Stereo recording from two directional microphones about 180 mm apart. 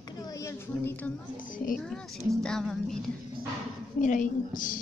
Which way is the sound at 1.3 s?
50° left (ahead or behind).